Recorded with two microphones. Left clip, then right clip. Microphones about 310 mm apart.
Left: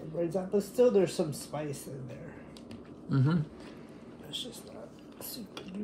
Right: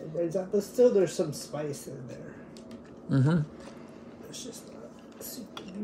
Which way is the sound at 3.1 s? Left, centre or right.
Centre.